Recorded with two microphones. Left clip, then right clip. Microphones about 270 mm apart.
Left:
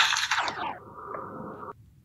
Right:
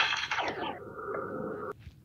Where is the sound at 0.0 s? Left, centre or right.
Centre.